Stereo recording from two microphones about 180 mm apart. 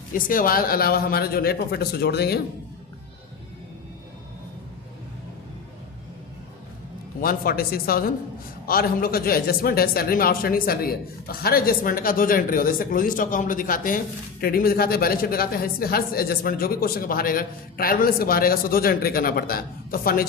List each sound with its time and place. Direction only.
0.1 s speech: 50° left (ahead or behind)
7.2 s speech: 55° left (ahead or behind)